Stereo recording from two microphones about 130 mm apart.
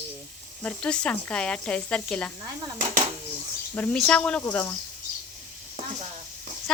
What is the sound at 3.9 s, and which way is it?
Speech, 5° left (ahead or behind).